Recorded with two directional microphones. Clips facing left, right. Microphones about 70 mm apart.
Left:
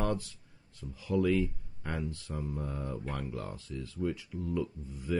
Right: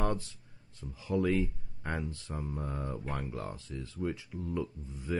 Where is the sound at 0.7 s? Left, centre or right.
Right.